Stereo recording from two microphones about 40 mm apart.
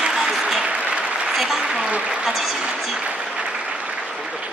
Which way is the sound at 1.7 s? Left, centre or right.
Right.